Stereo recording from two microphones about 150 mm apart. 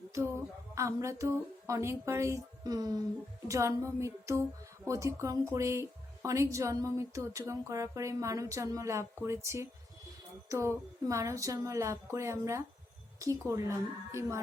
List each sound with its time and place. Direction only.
0.1 s a woman's voice: 20° right (ahead or behind)